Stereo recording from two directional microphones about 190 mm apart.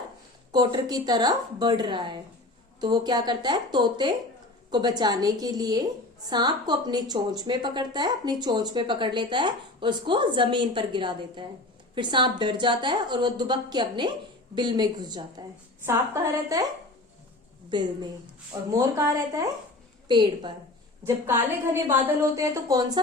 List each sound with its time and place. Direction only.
0.5 s a woman's voice: 25° right (ahead or behind)
17.7 s a woman's voice: 25° right (ahead or behind)
21.0 s a woman's voice: 10° right (ahead or behind)